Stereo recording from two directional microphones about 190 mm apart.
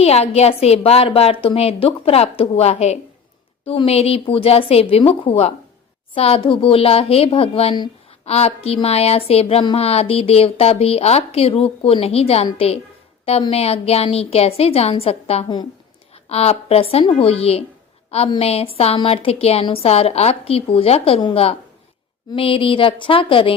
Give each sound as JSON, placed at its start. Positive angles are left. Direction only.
{"t": 0.0, "sound": "a woman's voice", "side_deg": 35}